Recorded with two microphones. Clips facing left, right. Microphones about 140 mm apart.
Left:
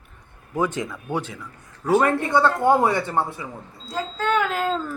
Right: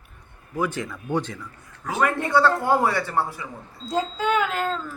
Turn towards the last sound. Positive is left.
turn(degrees=0)  # may be behind; listen again after turning